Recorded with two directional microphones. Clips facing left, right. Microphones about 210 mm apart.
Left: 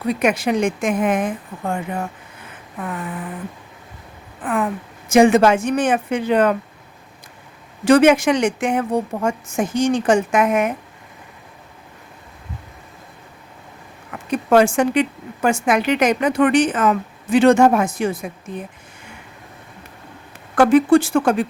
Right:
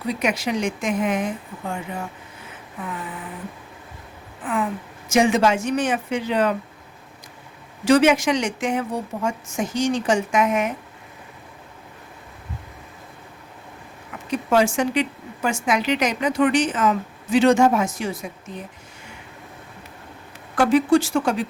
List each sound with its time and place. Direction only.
0.1 s speech: 55° left (ahead or behind)
5.0 s a woman's voice: 55° left (ahead or behind)
7.9 s a woman's voice: 55° left (ahead or behind)
14.3 s a woman's voice: 55° left (ahead or behind)
20.6 s speech: 55° left (ahead or behind)